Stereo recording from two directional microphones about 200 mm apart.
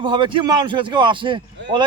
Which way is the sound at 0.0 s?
25° right (ahead or behind).